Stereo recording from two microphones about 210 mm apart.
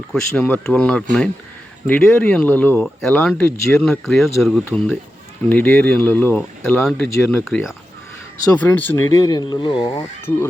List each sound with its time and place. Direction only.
0.1 s speech: 5° left (ahead or behind)